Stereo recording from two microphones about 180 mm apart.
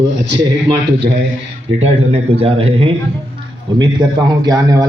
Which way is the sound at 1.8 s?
35° right (ahead or behind).